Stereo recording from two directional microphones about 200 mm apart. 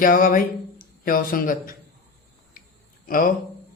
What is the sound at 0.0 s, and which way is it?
Speech, 45° left (ahead or behind).